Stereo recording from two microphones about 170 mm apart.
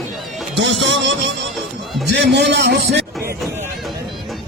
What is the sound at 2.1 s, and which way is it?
A man's voice, 85° right.